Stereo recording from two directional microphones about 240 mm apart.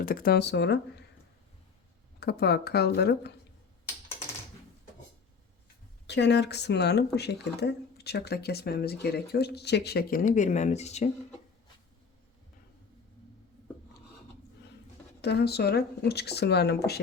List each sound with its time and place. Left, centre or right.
0.0 s speech: left
2.2 s speech: left
6.1 s speech: left
15.2 s speech: left